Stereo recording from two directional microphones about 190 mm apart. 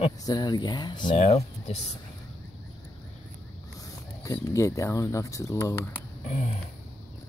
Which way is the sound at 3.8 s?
15° left (ahead or behind).